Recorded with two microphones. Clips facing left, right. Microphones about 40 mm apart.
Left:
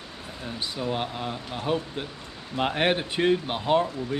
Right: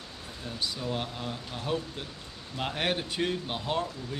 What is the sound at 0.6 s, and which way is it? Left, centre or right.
Speech, left.